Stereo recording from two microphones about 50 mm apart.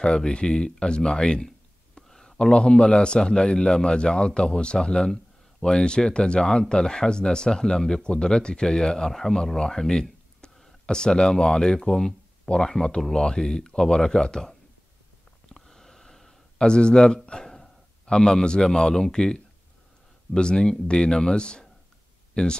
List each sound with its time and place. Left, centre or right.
0.0 s a man's voice: centre
2.0 s a sound: centre
2.3 s a man's voice: centre
15.5 s gasp: centre
18.0 s a man's voice: centre